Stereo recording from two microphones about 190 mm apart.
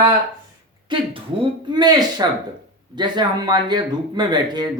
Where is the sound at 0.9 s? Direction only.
25° right (ahead or behind).